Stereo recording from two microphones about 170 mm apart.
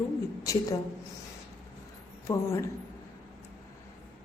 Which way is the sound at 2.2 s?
15° left (ahead or behind).